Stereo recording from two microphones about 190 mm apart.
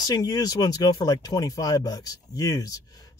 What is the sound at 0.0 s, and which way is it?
Speech, 20° left (ahead or behind).